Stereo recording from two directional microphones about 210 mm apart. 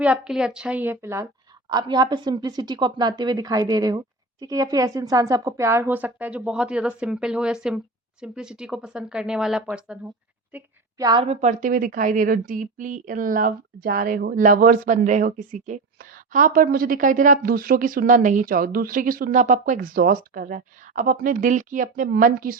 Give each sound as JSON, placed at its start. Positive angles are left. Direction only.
{"t": 0.0, "sound": "a woman's voice", "side_deg": -5}
{"t": 10.5, "sound": "a woman's voice", "side_deg": -15}
{"t": 11.3, "sound": "speech", "side_deg": -35}